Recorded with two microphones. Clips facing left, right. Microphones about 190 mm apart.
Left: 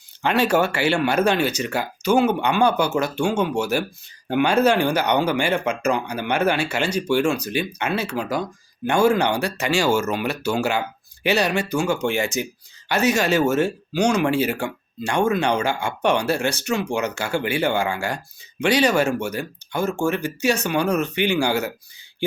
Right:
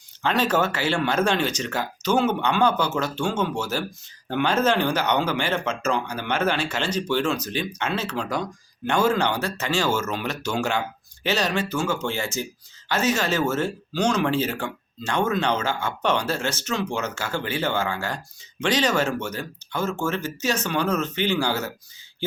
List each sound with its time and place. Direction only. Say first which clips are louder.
0.2 s speech: left 3 dB; 10° left (ahead or behind)
0.7 s speech: left 4 dB; 65° left (ahead or behind)
0.9 s speech: left 2 dB; 10° left (ahead or behind)